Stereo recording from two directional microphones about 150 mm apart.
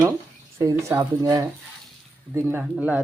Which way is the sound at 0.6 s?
20° right (ahead or behind).